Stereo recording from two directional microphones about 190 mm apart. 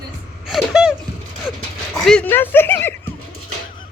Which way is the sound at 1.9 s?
Centre (ahead or behind).